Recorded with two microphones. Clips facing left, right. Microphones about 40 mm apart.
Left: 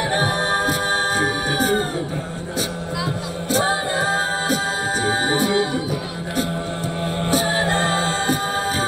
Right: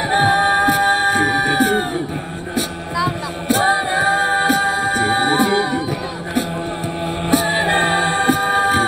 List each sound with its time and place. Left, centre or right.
0.0 s music: right
3.4 s music: right
3.9 s a capella: right
4.2 s music: right
4.8 s music: centre
7.4 s music: right
8.5 s a sound: right